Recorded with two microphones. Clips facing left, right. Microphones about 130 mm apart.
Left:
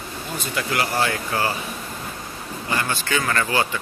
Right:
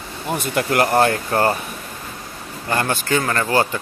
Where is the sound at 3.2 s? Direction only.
30° right (ahead or behind).